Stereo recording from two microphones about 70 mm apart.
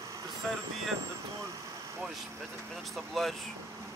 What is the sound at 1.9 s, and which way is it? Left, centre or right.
Vehicle, centre.